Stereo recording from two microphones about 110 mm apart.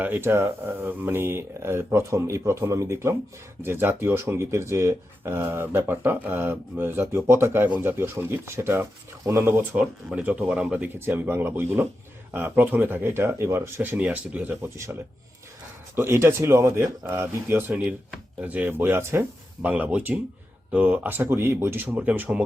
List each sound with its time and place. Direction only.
0.0 s speech: 20° right (ahead or behind)
16.0 s speech: 25° right (ahead or behind)